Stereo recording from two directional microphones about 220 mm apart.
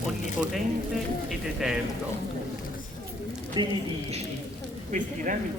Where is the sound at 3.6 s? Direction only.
20° right (ahead or behind).